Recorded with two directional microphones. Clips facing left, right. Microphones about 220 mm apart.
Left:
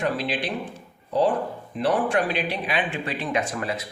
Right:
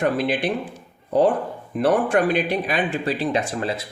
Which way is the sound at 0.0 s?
55° right (ahead or behind).